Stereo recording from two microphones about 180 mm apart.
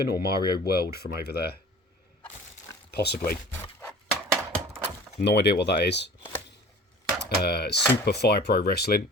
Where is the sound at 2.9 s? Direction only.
65° left (ahead or behind).